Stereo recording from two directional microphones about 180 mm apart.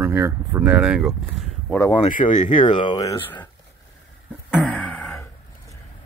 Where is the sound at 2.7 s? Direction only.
25° left (ahead or behind).